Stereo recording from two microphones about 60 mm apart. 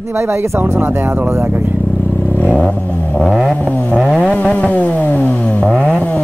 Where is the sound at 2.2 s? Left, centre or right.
Left.